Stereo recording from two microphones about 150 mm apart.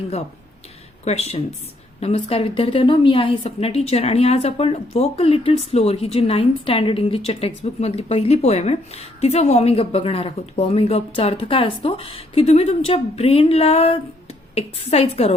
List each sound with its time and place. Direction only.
1.0 s a woman's voice: 45° left (ahead or behind)